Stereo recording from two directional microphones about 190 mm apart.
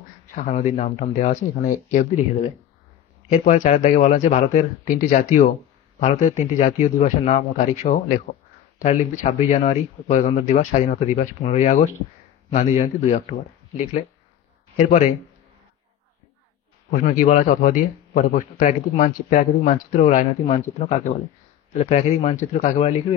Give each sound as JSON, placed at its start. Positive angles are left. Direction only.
{"t": 0.3, "sound": "speech", "side_deg": 40}
{"t": 3.3, "sound": "speech", "side_deg": 40}
{"t": 16.9, "sound": "a man's voice", "side_deg": 45}